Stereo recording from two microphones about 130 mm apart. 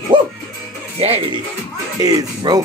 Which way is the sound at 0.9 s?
45° right (ahead or behind).